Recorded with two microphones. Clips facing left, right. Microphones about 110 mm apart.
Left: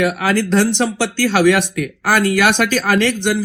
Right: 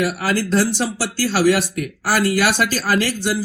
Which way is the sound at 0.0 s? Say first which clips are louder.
Left 4 dB; 55° left (ahead or behind).